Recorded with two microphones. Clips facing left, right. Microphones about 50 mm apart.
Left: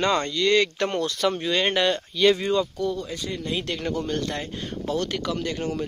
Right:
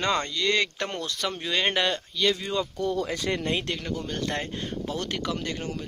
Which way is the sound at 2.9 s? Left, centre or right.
Right.